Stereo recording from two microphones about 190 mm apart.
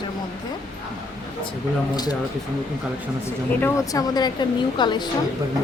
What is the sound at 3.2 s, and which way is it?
A woman's voice, 10° left (ahead or behind).